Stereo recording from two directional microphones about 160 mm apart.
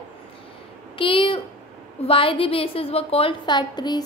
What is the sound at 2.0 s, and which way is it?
A woman's voice, 35° left (ahead or behind).